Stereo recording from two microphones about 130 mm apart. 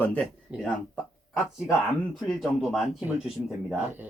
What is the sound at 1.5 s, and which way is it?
Speech, 5° right (ahead or behind).